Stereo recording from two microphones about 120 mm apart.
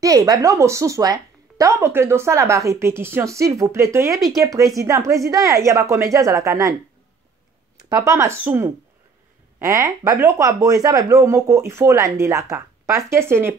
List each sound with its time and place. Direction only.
0.0 s a woman's voice: 30° right (ahead or behind)
7.9 s a woman's voice: 25° right (ahead or behind)